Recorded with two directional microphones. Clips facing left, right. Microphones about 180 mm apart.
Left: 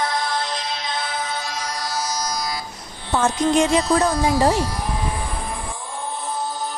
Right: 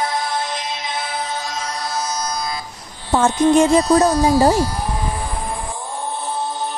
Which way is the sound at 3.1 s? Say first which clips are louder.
Right 4 dB; 30° right (ahead or behind).